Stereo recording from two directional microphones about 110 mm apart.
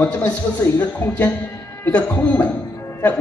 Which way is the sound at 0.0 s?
15° left (ahead or behind).